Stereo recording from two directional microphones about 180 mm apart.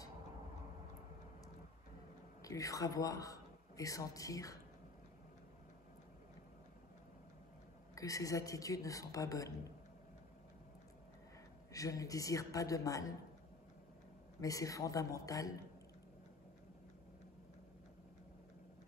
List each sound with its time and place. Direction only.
2.4 s a man's voice: 20° left (ahead or behind)
7.9 s speech: 20° left (ahead or behind)
11.7 s speech: 20° left (ahead or behind)
14.4 s a woman's voice: 20° left (ahead or behind)